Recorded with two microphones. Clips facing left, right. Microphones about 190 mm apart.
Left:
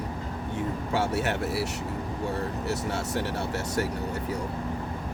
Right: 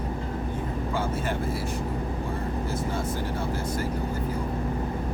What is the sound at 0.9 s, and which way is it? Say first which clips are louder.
Speech: left 3 dB; 75° left (ahead or behind).